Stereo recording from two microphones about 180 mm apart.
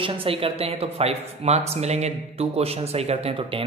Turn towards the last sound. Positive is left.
turn(degrees=-30)  # may be behind; listen again after turning